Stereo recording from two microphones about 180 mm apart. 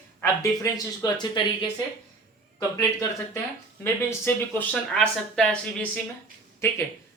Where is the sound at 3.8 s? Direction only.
10° left (ahead or behind).